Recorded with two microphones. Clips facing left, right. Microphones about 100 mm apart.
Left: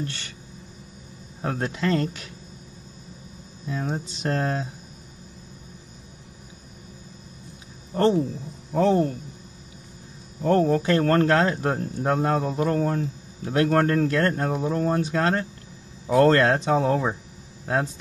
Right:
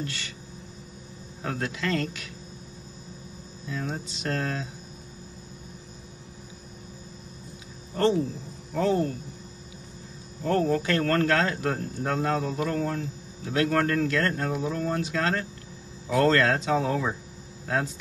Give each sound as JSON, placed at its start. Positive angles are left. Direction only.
{"t": 1.4, "sound": "speech", "side_deg": 30}
{"t": 3.6, "sound": "speech", "side_deg": 25}
{"t": 7.9, "sound": "speech", "side_deg": 35}
{"t": 10.4, "sound": "speech", "side_deg": 30}